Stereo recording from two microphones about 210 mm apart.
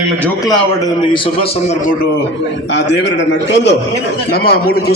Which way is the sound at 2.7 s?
55° left (ahead or behind).